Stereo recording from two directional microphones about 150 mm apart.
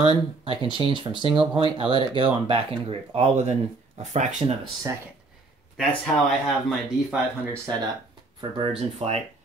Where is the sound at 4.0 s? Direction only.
50° right (ahead or behind).